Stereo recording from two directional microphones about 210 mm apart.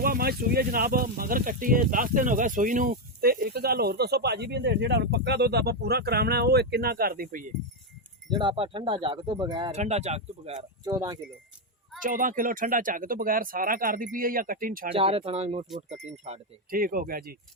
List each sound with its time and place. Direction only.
0.0 s speech: 45° right (ahead or behind)
8.3 s speech: 20° right (ahead or behind)
9.7 s speech: 30° right (ahead or behind)
10.8 s speech: 20° right (ahead or behind)
12.0 s speech: 40° right (ahead or behind)
14.9 s speech: 25° right (ahead or behind); by 17.3 s 45° right (ahead or behind)